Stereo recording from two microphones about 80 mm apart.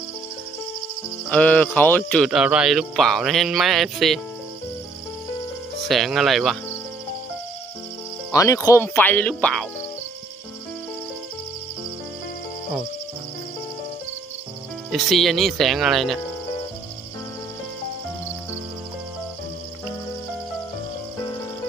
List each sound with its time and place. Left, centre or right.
1.3 s speech: centre
2.3 s cricket: centre
5.9 s cricket: centre
8.3 s speech: left
9.0 s speech: left
14.8 s cricket: centre